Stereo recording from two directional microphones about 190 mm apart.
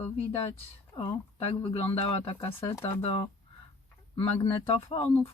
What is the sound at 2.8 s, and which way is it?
Speech, 30° left (ahead or behind).